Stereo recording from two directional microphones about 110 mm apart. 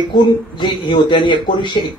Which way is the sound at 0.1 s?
45° left (ahead or behind).